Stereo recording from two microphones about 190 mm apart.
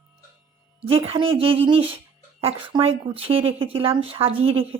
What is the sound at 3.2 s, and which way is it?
Speech, 30° right (ahead or behind).